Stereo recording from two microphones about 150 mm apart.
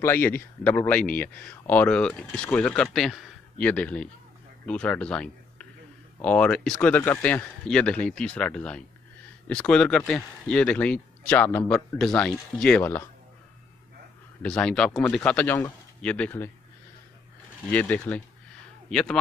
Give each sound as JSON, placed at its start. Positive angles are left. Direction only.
{"t": 0.0, "sound": "speech", "side_deg": 15}
{"t": 14.4, "sound": "speech", "side_deg": 5}
{"t": 17.6, "sound": "a man's voice", "side_deg": 10}